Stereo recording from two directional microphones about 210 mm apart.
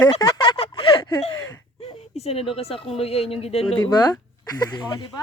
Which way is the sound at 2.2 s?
30° left (ahead or behind).